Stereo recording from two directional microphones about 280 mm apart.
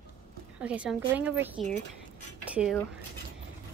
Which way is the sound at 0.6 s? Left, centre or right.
Centre.